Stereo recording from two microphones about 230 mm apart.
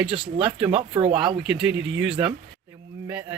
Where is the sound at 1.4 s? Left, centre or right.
Centre.